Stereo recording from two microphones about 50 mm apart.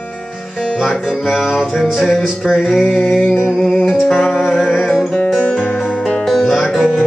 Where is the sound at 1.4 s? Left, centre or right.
Centre.